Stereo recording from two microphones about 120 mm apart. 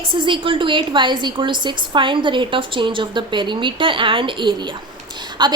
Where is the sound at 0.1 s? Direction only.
45° right (ahead or behind).